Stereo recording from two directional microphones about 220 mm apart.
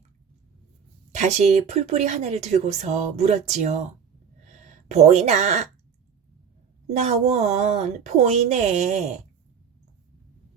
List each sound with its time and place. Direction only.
1.1 s speech: 30° right (ahead or behind)
4.9 s speech: 30° right (ahead or behind)
6.9 s speech: 30° right (ahead or behind)